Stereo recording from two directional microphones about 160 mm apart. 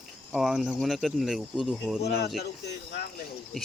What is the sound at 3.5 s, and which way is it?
Speech, centre (ahead or behind).